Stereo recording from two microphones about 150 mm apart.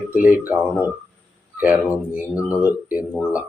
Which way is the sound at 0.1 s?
10° right (ahead or behind).